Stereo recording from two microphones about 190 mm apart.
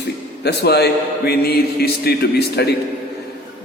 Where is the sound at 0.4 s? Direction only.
60° left (ahead or behind).